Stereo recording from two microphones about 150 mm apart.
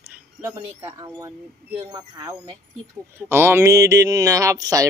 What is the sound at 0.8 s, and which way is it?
Speech, 20° right (ahead or behind).